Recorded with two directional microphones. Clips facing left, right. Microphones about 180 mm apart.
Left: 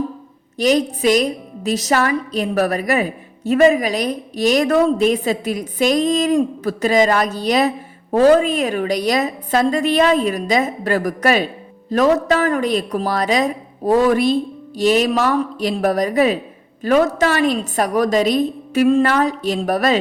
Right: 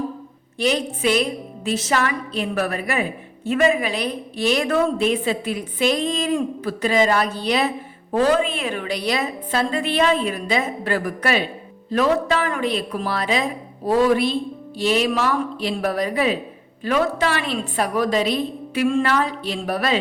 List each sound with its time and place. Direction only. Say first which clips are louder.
0.6 s a woman's voice: left 5 dB; 40° left (ahead or behind)